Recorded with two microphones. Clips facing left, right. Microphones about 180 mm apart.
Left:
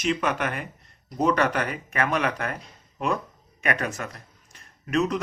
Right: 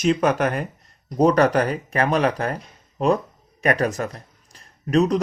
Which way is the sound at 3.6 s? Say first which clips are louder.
Right 7 dB; 35° right (ahead or behind).